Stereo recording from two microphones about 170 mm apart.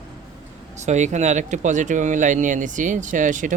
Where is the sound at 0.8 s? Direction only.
45° right (ahead or behind).